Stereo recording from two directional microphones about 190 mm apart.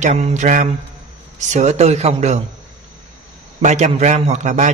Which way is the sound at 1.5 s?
35° right (ahead or behind).